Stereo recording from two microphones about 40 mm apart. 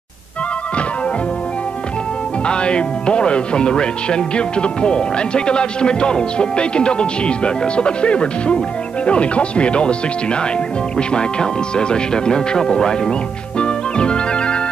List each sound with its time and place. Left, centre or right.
2.4 s speech: left
13.6 s music: left